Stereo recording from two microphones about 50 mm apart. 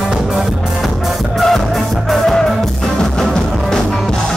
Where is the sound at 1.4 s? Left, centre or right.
Centre.